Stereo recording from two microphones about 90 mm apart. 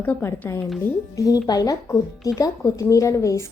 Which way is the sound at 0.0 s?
25° left (ahead or behind).